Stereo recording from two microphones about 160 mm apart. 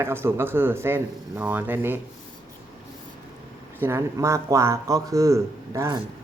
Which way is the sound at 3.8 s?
15° right (ahead or behind).